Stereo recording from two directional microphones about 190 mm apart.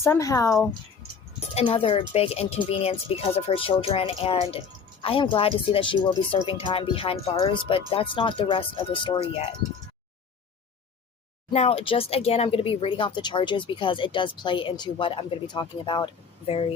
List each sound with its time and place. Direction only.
0.0 s speech: 15° left (ahead or behind)
1.4 s speech: 30° left (ahead or behind)
11.5 s speech: 30° left (ahead or behind)